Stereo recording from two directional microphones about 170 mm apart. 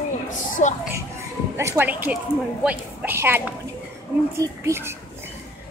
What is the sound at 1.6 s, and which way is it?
A woman's voice, 15° right (ahead or behind).